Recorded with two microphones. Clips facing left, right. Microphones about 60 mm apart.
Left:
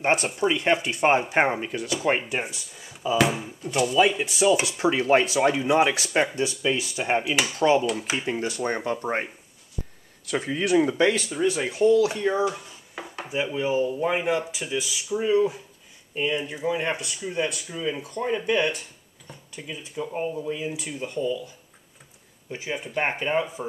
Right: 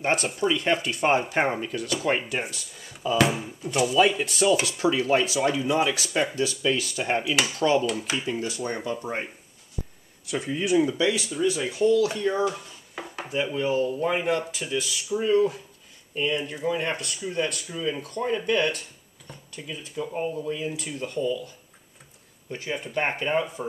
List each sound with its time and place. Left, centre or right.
0.0 s speech: left
2.4 s speech: centre
8.3 s speech: left
10.2 s speech: left; by 13.0 s centre
13.0 s dishes: centre
13.3 s speech: centre